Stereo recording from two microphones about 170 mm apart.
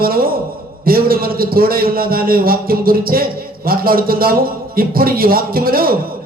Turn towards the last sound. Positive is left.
turn(degrees=-60)  # may be behind; listen again after turning